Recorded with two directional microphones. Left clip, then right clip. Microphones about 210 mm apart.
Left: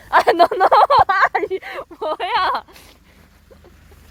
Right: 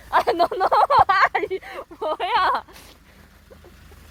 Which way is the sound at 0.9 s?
10° left (ahead or behind).